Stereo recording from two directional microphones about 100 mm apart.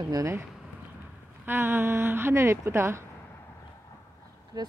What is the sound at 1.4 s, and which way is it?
Speech, 20° right (ahead or behind).